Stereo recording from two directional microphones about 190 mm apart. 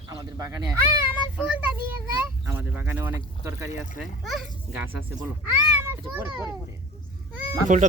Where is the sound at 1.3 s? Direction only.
5° right (ahead or behind).